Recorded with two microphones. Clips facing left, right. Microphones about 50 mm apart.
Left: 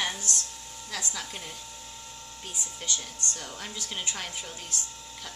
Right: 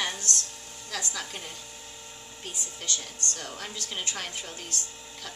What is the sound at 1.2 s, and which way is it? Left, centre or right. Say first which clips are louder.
Speech: right 1 dB; centre.